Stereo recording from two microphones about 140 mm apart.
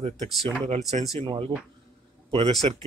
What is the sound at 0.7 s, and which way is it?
Speech, 50° right (ahead or behind).